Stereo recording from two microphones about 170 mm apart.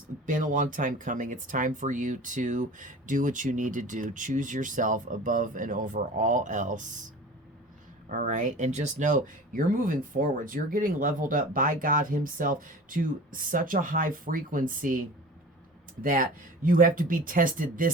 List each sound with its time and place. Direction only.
0.3 s speech: 50° right (ahead or behind)
8.1 s speech: 50° right (ahead or behind)
16.0 s speech: 55° right (ahead or behind)